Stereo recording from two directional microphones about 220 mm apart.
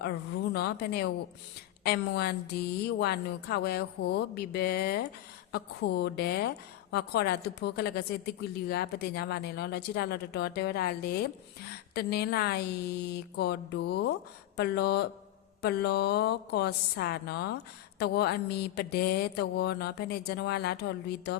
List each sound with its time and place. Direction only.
0.0 s a woman's voice: 45° left (ahead or behind)